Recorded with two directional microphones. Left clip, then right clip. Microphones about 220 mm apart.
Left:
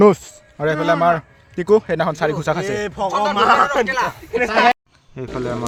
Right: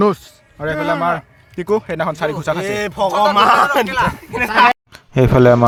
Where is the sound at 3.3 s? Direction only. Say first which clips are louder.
Right 1 dB; 55° right (ahead or behind).